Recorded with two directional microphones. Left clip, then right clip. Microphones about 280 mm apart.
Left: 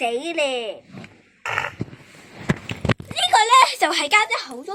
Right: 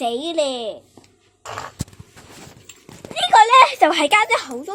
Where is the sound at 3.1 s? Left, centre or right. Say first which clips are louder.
Right 4 dB; right.